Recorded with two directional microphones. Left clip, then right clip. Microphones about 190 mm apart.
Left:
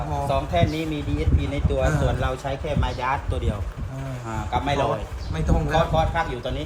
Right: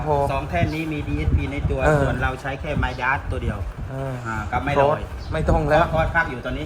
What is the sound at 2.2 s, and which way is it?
A man's voice, 50° left (ahead or behind).